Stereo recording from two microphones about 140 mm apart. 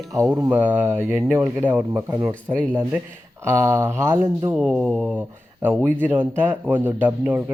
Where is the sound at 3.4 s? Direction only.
20° right (ahead or behind).